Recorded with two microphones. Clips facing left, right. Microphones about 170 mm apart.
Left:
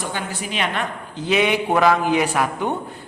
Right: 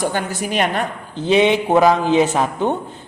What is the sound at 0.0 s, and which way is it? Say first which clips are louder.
A man's voice: right 6 dB; 45° right (ahead or behind).